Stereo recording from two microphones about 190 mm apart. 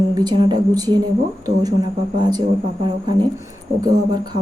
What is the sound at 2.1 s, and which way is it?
Speech, 20° right (ahead or behind).